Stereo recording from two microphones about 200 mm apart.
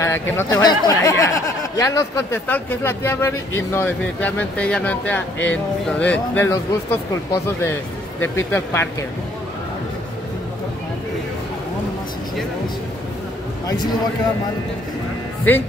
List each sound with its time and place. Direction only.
0.0 s speech: 15° left (ahead or behind)